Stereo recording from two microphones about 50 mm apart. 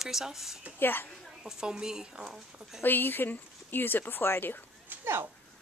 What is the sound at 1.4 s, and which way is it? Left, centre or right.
A woman's voice, centre.